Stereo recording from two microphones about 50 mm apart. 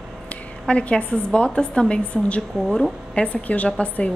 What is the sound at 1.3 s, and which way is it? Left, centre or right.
Speech, centre.